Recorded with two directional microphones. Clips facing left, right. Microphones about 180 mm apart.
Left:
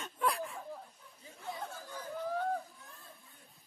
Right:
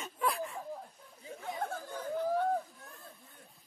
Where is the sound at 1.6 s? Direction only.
55° right (ahead or behind).